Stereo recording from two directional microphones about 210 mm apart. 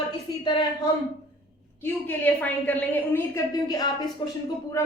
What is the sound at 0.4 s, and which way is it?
Speech, 20° left (ahead or behind).